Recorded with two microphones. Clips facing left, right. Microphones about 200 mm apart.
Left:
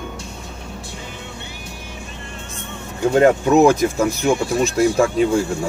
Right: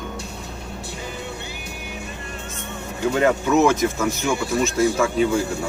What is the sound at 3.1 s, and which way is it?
Speech, 35° left (ahead or behind).